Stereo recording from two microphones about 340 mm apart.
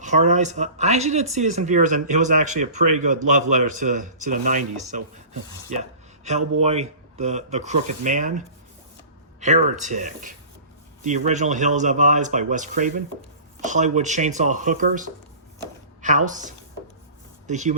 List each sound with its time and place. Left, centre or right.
0.0 s speech: right
9.4 s a woman's voice: right